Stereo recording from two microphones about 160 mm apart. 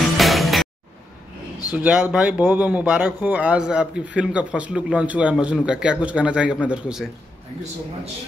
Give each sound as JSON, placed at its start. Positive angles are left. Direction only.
{"t": 0.2, "sound": "music", "side_deg": 0}
{"t": 1.7, "sound": "speech", "side_deg": -10}